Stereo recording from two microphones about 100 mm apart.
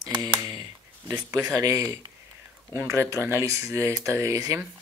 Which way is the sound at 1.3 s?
30° right (ahead or behind).